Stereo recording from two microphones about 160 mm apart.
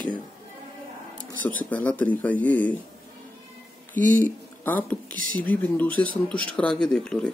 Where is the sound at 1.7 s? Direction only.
10° left (ahead or behind).